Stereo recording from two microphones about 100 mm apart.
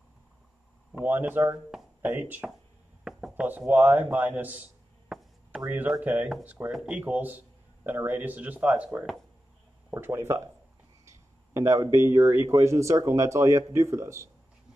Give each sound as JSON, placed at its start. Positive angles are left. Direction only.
{"t": 0.9, "sound": "speech", "side_deg": -20}
{"t": 3.0, "sound": "speech", "side_deg": -5}
{"t": 5.1, "sound": "chop", "side_deg": 0}
{"t": 5.7, "sound": "speech", "side_deg": -15}